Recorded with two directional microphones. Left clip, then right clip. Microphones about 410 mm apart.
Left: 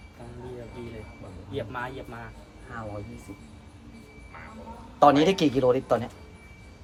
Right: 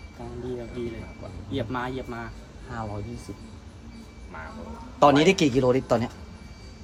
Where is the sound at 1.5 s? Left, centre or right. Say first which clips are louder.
Right 3 dB; right.